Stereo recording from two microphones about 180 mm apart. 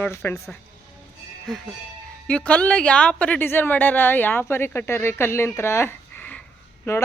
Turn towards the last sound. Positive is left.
turn(degrees=15)  # may be behind; listen again after turning